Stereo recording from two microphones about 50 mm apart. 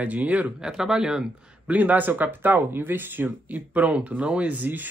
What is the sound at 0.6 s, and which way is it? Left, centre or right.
Speech, centre.